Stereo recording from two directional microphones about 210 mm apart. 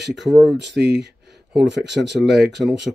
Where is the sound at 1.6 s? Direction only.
55° right (ahead or behind).